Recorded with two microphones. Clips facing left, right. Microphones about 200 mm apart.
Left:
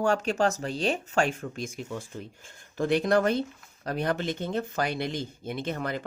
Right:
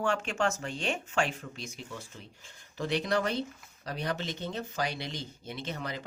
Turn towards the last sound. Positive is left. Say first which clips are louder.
# left 6 dB
turn(degrees=50)  # may be behind; listen again after turning